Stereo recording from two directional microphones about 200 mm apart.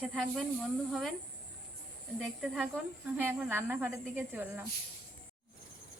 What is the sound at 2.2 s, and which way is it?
A woman's voice, centre (ahead or behind).